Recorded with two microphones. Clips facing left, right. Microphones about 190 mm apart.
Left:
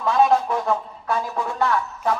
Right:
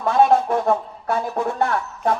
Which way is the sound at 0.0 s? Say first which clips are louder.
Right 2 dB; 50° right (ahead or behind).